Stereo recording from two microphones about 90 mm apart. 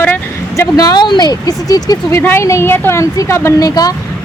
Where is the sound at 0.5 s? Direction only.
45° left (ahead or behind).